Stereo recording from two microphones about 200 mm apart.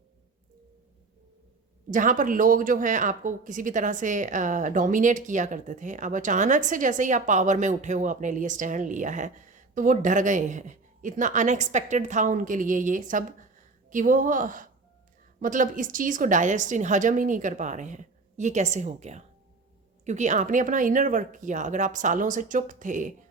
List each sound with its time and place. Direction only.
1.9 s speech: 40° right (ahead or behind)